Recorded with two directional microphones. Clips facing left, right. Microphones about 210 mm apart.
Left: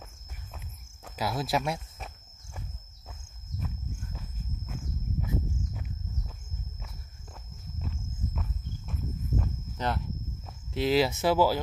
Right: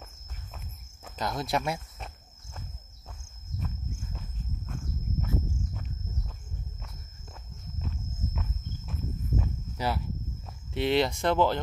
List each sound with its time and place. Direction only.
1.1 s speech: 5° left (ahead or behind)
3.5 s walk: centre (ahead or behind)
5.2 s walk: 15° left (ahead or behind)
7.8 s walk: centre (ahead or behind)
10.7 s speech: centre (ahead or behind)